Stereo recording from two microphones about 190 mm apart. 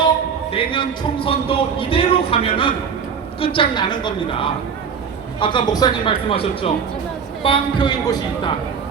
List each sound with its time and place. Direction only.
0.5 s speech: 25° left (ahead or behind)